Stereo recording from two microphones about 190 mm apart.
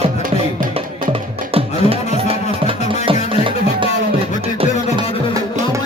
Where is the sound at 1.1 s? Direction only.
30° right (ahead or behind).